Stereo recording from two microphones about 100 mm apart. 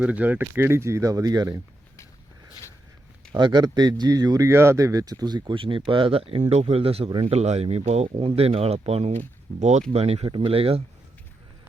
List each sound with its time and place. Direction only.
0.0 s speech: 15° right (ahead or behind); by 1.6 s 35° right (ahead or behind)
3.3 s speech: 45° right (ahead or behind)
5.5 s speech: 60° right (ahead or behind)